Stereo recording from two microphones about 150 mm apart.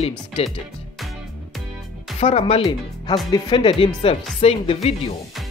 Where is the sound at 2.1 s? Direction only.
45° left (ahead or behind).